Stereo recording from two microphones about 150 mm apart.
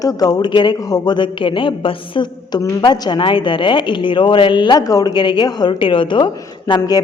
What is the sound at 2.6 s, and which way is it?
A woman's voice, 20° left (ahead or behind).